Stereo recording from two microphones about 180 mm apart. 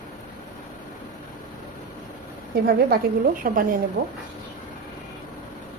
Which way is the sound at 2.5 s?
60° right (ahead or behind).